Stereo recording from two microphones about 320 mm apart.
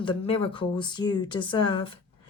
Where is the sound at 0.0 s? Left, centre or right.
Centre.